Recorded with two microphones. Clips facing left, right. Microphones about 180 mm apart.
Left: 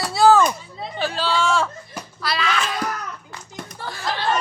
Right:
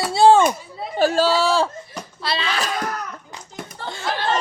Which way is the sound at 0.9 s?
45° right (ahead or behind).